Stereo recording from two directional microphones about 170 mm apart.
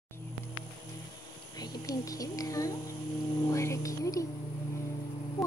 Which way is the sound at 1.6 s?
20° left (ahead or behind).